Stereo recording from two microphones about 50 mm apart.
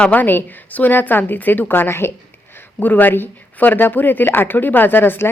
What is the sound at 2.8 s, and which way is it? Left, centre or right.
A woman's voice, left.